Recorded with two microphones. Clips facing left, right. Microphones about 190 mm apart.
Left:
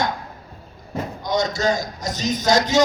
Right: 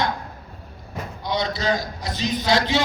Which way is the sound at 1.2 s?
45° left (ahead or behind).